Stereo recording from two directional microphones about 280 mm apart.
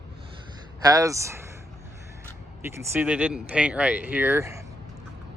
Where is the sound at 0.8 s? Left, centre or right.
Centre.